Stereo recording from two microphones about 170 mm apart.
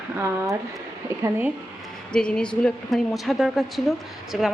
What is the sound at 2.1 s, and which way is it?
A woman's voice, 5° left (ahead or behind).